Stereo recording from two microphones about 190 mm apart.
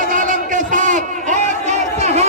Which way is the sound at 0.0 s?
45° right (ahead or behind).